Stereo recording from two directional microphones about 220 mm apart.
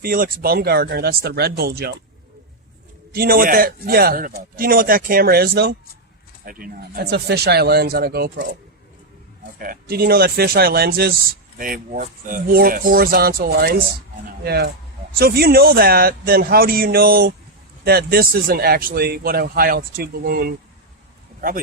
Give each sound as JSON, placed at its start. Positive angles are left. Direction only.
{"t": 0.0, "sound": "speech", "side_deg": -40}
{"t": 3.1, "sound": "a man's voice", "side_deg": -40}
{"t": 9.6, "sound": "a man's voice", "side_deg": -40}